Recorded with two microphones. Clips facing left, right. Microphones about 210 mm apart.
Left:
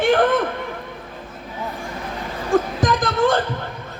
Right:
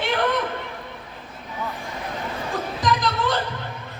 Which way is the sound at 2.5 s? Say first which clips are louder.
Left 7 dB; 50° left (ahead or behind).